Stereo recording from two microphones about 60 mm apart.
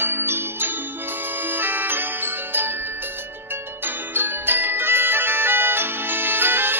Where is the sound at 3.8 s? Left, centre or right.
Right.